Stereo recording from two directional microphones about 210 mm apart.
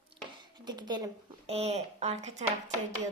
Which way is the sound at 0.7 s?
20° right (ahead or behind).